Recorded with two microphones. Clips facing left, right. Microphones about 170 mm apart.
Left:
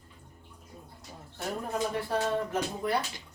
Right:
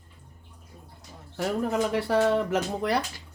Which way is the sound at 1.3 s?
80° right.